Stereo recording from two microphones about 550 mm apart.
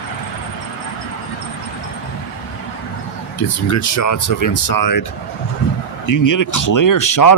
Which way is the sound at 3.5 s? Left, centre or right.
Left.